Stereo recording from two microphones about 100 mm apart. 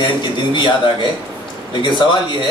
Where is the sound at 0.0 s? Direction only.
50° left (ahead or behind).